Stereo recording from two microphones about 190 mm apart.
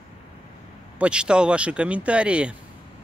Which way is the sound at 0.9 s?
5° right (ahead or behind).